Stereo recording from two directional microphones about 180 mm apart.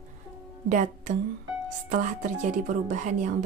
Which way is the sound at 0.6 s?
45° right (ahead or behind).